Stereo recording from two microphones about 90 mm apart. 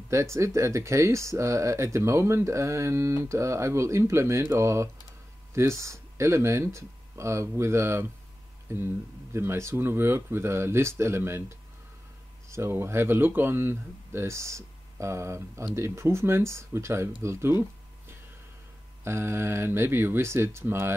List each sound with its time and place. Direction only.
0.1 s speech: 30° right (ahead or behind)